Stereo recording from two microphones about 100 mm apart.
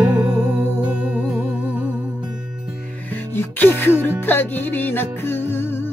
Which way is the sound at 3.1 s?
20° left (ahead or behind).